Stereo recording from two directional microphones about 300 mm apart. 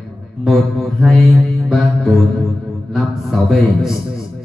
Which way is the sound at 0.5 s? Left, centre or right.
Centre.